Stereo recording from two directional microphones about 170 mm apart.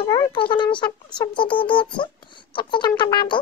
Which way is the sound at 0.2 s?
30° left (ahead or behind).